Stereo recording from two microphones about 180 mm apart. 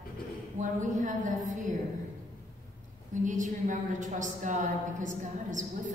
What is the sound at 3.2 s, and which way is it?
A woman's voice, 45° right (ahead or behind).